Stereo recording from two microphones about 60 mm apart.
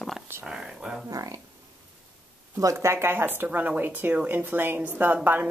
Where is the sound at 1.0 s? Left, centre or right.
Right.